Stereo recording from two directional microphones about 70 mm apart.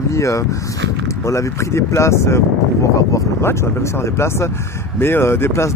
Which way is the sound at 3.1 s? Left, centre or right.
Left.